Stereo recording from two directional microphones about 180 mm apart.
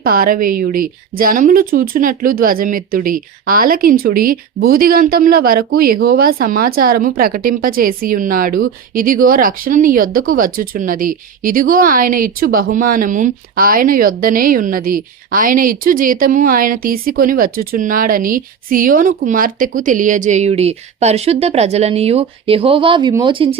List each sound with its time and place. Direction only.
0.0 s a woman's voice: 55° right (ahead or behind); by 23.6 s 30° right (ahead or behind)